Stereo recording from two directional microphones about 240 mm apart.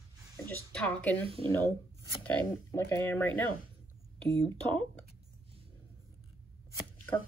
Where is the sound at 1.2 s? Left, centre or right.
Right.